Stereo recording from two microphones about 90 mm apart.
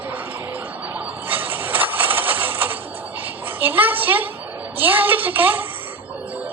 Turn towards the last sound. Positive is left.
turn(degrees=-20)  # may be behind; listen again after turning